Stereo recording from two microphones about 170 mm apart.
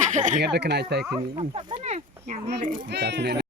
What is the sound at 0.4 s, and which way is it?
Speech, 80° right.